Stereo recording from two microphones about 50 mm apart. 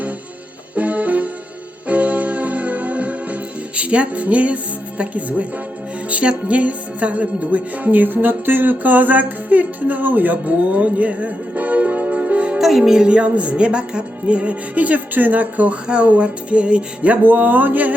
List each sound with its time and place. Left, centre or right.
0.8 s music: right
3.8 s speech: right
6.1 s music: right
12.5 s music: centre; by 17.2 s right
17.2 s music: right